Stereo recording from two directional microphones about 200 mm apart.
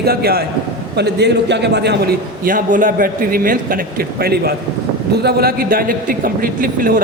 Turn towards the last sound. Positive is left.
turn(degrees=-45)  # may be behind; listen again after turning